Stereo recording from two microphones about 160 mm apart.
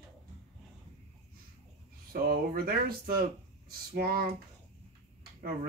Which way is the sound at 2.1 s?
65° right (ahead or behind).